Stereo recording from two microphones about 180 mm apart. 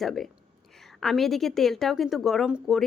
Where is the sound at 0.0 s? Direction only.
Centre (ahead or behind).